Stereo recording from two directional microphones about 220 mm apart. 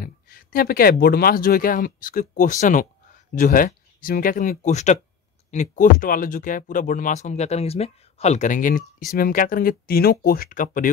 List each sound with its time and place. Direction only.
0.0 s speech: 40° left (ahead or behind)